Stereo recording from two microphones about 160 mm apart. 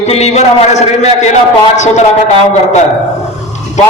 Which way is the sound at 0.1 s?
45° left (ahead or behind).